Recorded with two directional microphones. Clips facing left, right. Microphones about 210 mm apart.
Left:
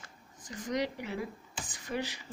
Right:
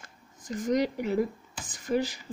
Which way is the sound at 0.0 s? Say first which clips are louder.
Right 1 dB; 45° right (ahead or behind).